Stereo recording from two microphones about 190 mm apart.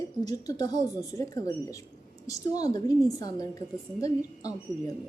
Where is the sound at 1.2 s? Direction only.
15° left (ahead or behind).